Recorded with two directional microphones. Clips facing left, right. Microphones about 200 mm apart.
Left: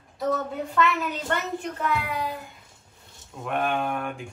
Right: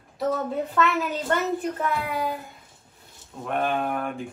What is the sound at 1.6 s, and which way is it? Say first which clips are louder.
Child singing: right 1 dB; 50° right (ahead or behind).